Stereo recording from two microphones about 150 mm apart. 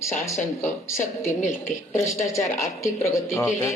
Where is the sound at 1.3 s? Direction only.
55° left (ahead or behind).